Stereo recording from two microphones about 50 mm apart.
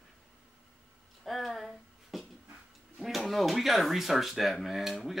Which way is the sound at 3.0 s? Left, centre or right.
Centre.